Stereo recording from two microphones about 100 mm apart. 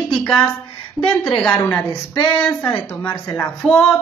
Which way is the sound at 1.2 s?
15° left (ahead or behind).